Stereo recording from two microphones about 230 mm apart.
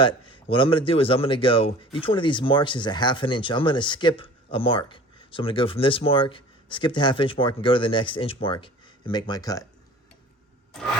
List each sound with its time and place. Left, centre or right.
0.0 s speech: left